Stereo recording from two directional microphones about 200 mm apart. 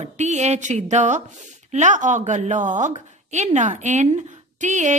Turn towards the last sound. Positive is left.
turn(degrees=-35)  # may be behind; listen again after turning